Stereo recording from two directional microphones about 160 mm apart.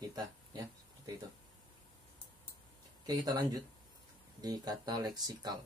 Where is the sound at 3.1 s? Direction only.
25° right (ahead or behind).